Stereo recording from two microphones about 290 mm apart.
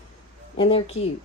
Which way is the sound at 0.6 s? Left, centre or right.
Centre.